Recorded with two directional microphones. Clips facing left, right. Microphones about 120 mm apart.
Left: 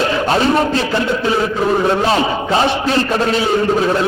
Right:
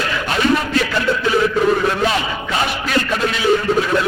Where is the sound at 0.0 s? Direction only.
30° left (ahead or behind).